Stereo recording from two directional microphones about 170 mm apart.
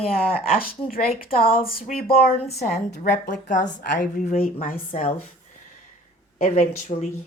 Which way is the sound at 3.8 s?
50° left (ahead or behind).